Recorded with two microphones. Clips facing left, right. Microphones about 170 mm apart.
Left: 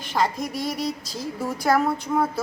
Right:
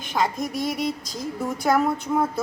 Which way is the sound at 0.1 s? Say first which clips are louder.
Even; centre (ahead or behind).